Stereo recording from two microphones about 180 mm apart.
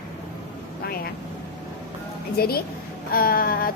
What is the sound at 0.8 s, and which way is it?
Speech, 55° left (ahead or behind).